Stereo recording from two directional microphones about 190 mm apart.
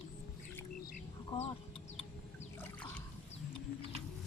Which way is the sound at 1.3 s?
30° left (ahead or behind).